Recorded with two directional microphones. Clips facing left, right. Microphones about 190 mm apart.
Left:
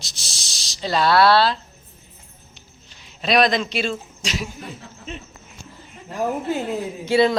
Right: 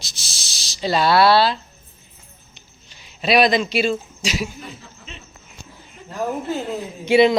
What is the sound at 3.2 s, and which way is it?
Speech, 5° right (ahead or behind).